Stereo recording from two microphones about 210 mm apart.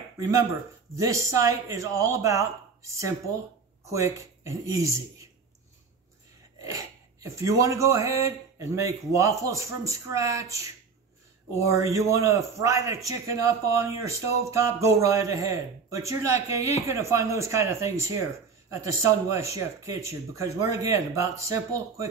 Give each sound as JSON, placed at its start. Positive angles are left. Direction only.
{"t": 0.9, "sound": "a man's voice", "side_deg": -15}
{"t": 6.6, "sound": "a sound", "side_deg": -15}
{"t": 7.3, "sound": "a man's voice", "side_deg": -15}